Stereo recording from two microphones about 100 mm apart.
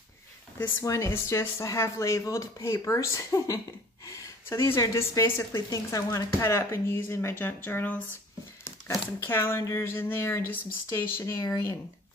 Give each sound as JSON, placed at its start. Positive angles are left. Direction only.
{"t": 0.6, "sound": "speech", "side_deg": 30}